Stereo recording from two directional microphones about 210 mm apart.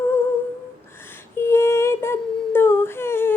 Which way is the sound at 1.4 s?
10° left (ahead or behind).